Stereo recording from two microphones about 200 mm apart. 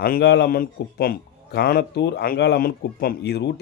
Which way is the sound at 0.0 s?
55° left (ahead or behind).